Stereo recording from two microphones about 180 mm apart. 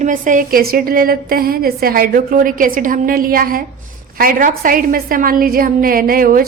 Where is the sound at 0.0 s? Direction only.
45° right (ahead or behind).